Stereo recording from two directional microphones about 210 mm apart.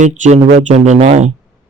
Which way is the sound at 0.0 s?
35° right (ahead or behind).